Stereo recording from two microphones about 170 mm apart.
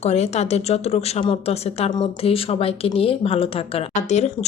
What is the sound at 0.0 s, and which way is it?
Speech, 40° left (ahead or behind).